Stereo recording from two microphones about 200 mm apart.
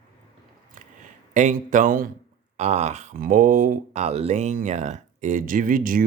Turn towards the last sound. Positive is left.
turn(degrees=-45)  # may be behind; listen again after turning